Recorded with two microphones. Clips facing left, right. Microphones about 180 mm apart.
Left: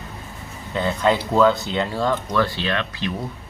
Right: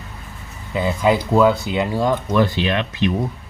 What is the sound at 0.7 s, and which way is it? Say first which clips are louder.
Speech: right 2 dB; 10° right (ahead or behind).